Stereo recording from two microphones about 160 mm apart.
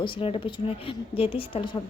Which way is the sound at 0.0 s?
35° left (ahead or behind).